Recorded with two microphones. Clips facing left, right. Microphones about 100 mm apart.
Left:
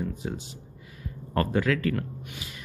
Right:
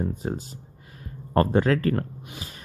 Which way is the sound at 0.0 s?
40° right (ahead or behind).